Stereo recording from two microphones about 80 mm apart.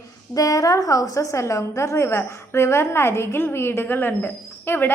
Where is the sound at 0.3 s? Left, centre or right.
Left.